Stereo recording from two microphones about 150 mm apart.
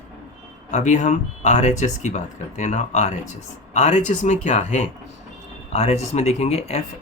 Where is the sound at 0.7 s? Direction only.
55° left (ahead or behind).